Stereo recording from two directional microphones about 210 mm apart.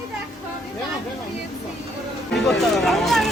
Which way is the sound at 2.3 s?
Centre (ahead or behind).